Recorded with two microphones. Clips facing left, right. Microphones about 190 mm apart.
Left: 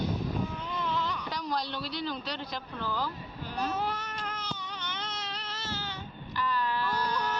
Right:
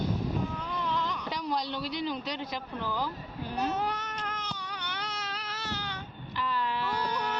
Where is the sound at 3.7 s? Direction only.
5° left (ahead or behind).